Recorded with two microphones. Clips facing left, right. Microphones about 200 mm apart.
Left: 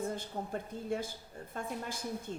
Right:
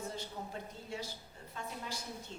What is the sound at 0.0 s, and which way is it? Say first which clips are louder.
A woman's voice: left 5 dB; 55° left (ahead or behind).